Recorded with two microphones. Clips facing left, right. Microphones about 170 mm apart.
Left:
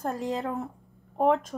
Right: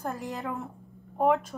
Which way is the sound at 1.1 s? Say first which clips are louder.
Left 1 dB; 30° left (ahead or behind).